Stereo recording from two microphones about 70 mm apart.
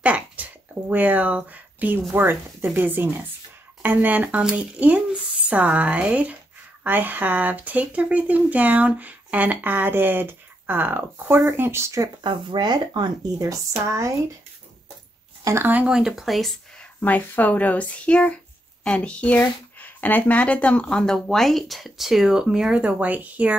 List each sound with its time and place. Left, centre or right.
0.0 s a sound: right
2.1 s speech: right
12.2 s speech: right
13.4 s speech: right
15.6 s speech: right
15.9 s speech: centre
17.0 s speech: left
21.0 s speech: centre; by 23.5 s right